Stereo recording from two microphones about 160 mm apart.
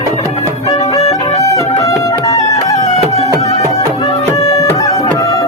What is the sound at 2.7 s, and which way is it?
Music, 40° left (ahead or behind).